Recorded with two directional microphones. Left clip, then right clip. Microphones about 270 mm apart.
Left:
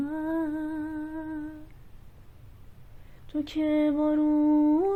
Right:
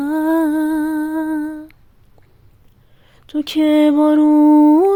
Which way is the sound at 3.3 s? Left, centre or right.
Right.